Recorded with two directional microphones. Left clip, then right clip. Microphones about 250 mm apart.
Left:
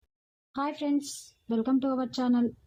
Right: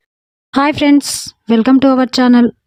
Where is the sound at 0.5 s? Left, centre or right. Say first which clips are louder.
Right 19 dB; right.